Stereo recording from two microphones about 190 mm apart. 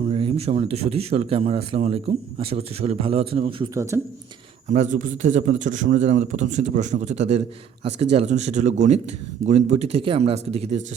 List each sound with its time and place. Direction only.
0.1 s speech: 30° right (ahead or behind)
3.8 s speech: 15° right (ahead or behind)
4.7 s speech: 40° right (ahead or behind)